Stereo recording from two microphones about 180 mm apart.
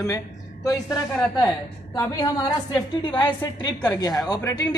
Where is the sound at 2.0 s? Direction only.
20° left (ahead or behind).